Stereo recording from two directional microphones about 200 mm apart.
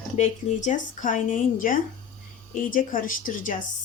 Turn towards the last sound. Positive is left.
turn(degrees=40)  # may be behind; listen again after turning